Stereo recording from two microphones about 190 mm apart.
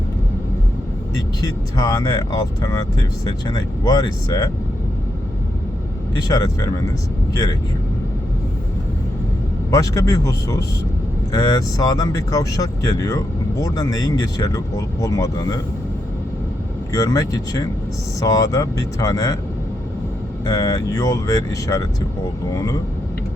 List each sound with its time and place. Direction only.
1.1 s speech: 20° left (ahead or behind)
6.2 s speech: 15° left (ahead or behind)
9.6 s speech: 15° left (ahead or behind)
16.9 s speech: 20° left (ahead or behind)
20.4 s speech: 20° left (ahead or behind)